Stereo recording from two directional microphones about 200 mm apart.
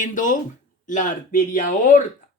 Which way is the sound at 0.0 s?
40° left (ahead or behind).